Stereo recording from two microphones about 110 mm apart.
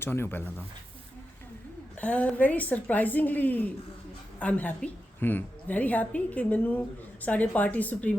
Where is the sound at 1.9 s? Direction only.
15° left (ahead or behind).